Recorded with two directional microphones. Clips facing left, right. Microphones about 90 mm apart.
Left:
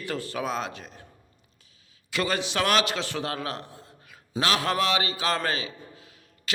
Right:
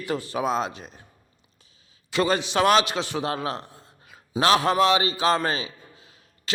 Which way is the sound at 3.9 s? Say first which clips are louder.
Even; 25° right (ahead or behind).